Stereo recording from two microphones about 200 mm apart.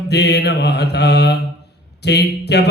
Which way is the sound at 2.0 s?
55° left (ahead or behind).